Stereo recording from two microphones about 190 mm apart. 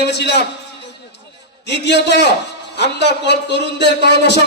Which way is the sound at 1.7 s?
65° left (ahead or behind).